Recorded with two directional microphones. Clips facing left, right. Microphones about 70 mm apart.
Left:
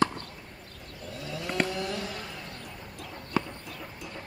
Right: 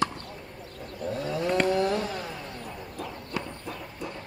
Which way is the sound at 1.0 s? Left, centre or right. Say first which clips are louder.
Right 8 dB; right.